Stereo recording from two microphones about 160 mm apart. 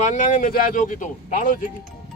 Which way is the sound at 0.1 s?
55° left (ahead or behind).